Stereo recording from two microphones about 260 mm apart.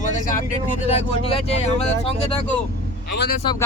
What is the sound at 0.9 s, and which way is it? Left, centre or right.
Speech, left.